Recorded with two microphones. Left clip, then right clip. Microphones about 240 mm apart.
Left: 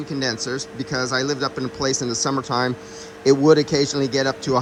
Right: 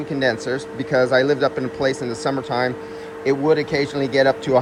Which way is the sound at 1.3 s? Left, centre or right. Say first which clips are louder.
Right 5 dB; centre.